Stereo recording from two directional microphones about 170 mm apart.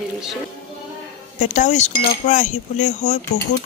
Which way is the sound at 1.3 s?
45° left (ahead or behind).